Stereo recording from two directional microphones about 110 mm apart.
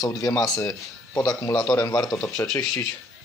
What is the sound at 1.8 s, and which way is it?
Speech, 35° left (ahead or behind).